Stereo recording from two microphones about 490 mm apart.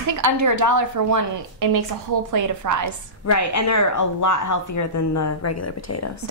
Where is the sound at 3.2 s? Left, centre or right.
Left.